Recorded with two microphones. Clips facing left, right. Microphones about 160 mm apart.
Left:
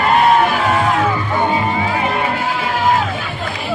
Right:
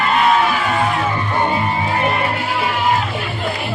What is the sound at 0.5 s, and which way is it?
Music, 60° left (ahead or behind).